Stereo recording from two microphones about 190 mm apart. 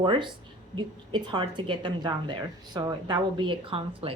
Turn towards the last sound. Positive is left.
turn(degrees=-30)  # may be behind; listen again after turning